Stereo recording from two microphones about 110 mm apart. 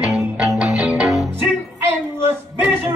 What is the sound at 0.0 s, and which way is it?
Music, 5° right (ahead or behind).